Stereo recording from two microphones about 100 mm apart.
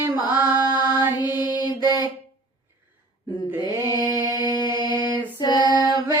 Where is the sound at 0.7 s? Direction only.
50° left (ahead or behind).